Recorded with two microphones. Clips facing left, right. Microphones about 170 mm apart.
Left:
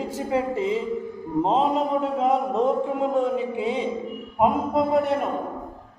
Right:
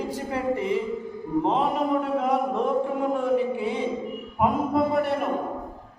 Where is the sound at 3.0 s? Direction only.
20° left (ahead or behind).